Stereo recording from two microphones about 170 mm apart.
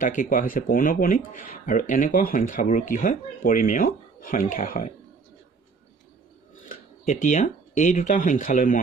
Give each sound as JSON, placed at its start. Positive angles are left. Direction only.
{"t": 0.0, "sound": "speech", "side_deg": 50}
{"t": 6.7, "sound": "speech", "side_deg": 45}